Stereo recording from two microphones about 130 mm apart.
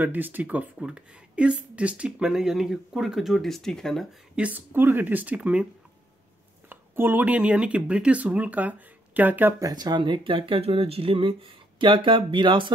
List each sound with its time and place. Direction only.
0.0 s speech: 15° right (ahead or behind); by 4.1 s 5° left (ahead or behind)
4.4 s speech: 15° right (ahead or behind)
6.7 s speech: 15° right (ahead or behind)
9.6 s speech: 30° right (ahead or behind)